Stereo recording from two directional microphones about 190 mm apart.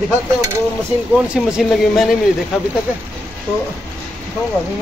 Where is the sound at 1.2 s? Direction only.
5° right (ahead or behind).